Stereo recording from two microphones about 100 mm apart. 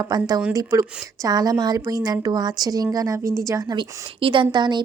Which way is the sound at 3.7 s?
60° right (ahead or behind).